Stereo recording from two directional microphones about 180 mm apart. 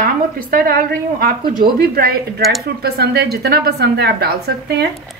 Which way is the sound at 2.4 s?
Centre (ahead or behind).